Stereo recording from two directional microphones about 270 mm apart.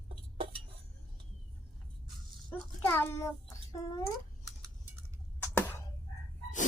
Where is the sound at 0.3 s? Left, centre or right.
Centre.